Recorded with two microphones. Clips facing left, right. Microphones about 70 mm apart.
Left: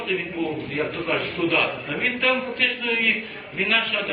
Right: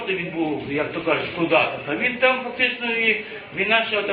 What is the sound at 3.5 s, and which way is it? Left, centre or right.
Speech, centre.